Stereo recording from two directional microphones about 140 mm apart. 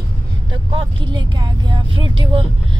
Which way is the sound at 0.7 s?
35° right (ahead or behind).